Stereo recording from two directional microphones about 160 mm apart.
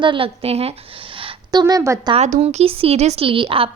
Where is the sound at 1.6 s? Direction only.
20° right (ahead or behind).